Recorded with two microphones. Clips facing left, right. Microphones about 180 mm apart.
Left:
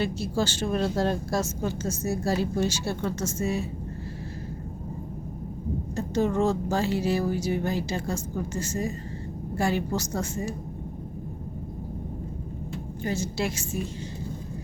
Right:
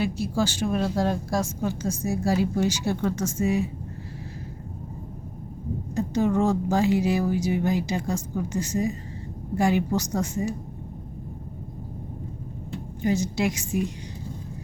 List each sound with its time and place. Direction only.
0.0 s speech: 10° right (ahead or behind)
6.0 s speech: 15° right (ahead or behind)
13.0 s speech: 15° right (ahead or behind)